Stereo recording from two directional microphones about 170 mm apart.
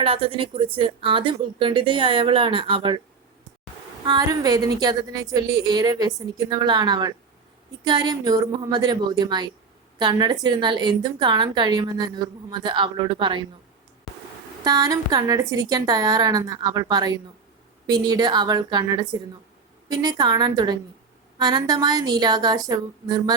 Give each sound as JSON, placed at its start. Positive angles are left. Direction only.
{"t": 0.0, "sound": "a woman's voice", "side_deg": -30}
{"t": 4.0, "sound": "a woman's voice", "side_deg": -25}
{"t": 14.6, "sound": "a woman's voice", "side_deg": -20}